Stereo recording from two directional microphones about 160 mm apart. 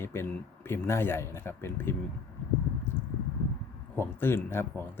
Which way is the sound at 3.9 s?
15° left (ahead or behind).